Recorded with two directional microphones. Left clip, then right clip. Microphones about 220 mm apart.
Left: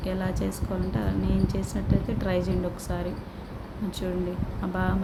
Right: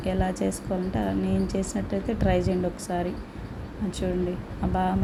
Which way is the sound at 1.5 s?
5° right (ahead or behind).